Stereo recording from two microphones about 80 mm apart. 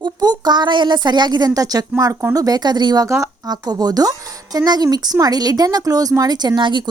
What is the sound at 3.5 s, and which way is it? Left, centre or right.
Speech, right.